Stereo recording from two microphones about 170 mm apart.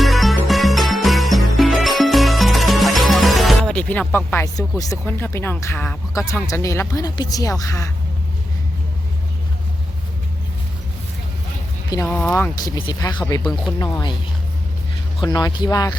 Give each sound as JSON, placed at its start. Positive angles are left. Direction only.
{"t": 0.0, "sound": "music", "side_deg": 0}
{"t": 5.0, "sound": "speech", "side_deg": 10}
{"t": 12.0, "sound": "speech", "side_deg": 5}
{"t": 12.5, "sound": "speech", "side_deg": 20}
{"t": 13.4, "sound": "speech", "side_deg": 0}
{"t": 13.7, "sound": "speech", "side_deg": 20}
{"t": 15.2, "sound": "speech", "side_deg": 25}